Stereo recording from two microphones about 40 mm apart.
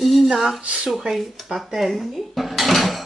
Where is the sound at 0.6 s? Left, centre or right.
Right.